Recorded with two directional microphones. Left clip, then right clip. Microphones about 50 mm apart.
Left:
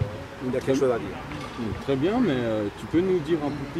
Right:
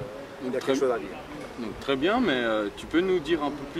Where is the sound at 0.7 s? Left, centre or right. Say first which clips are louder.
Left 3 dB; centre.